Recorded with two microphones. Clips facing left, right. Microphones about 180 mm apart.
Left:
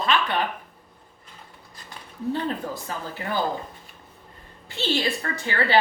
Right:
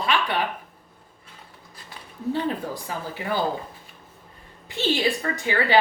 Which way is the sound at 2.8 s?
15° right (ahead or behind).